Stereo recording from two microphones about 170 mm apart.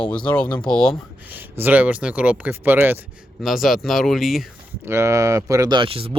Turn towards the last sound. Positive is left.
turn(degrees=-30)  # may be behind; listen again after turning